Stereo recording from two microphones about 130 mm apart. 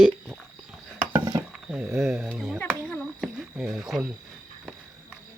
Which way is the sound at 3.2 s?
Centre (ahead or behind).